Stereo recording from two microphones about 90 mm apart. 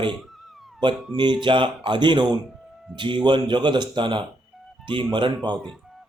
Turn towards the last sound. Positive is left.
turn(degrees=-60)  # may be behind; listen again after turning